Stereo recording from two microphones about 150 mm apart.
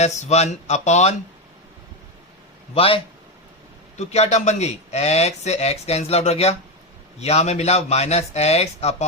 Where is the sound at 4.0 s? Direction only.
45° left (ahead or behind).